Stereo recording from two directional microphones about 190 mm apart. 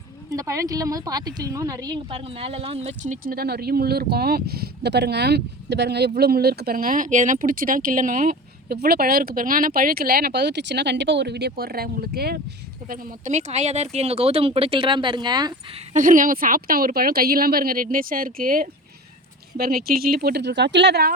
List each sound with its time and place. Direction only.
0.3 s speech: 15° right (ahead or behind)
15.9 s speech: 45° right (ahead or behind); by 21.1 s 60° right (ahead or behind)